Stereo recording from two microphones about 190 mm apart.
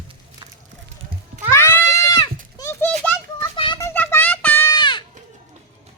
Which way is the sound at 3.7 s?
10° left (ahead or behind).